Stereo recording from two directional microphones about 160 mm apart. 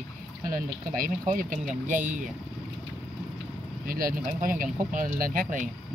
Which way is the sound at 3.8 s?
65° right (ahead or behind).